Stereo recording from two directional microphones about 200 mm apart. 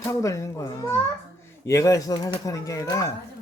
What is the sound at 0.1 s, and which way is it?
Speech, 15° left (ahead or behind).